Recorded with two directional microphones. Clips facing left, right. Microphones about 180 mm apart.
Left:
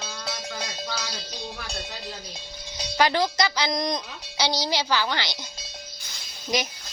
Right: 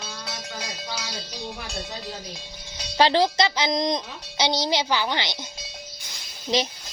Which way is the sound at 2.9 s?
30° right (ahead or behind).